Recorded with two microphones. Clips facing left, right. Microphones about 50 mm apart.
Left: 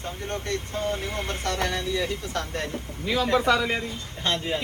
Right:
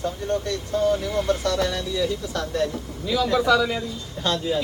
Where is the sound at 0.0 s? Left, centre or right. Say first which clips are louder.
Right 7 dB; left.